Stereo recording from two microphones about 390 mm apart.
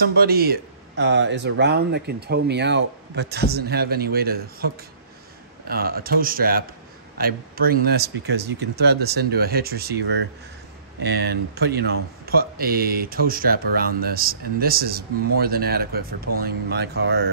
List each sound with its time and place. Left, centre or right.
0.0 s speech: right
5.7 s speech: right